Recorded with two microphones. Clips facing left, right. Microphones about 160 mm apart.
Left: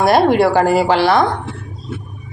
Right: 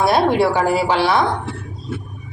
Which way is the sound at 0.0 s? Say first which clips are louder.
Left 3 dB; 90° left.